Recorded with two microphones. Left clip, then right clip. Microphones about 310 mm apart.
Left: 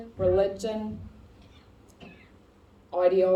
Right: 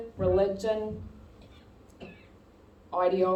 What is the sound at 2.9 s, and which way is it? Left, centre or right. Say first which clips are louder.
Speech: left 3 dB; left.